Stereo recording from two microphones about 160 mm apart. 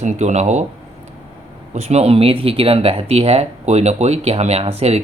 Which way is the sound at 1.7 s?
40° right (ahead or behind).